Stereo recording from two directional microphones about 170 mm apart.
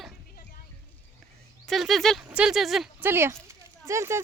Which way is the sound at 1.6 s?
Centre (ahead or behind).